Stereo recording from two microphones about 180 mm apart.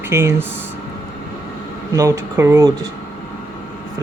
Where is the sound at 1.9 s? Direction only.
15° right (ahead or behind).